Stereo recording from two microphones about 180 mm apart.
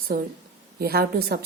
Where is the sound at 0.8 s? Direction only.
60° right (ahead or behind).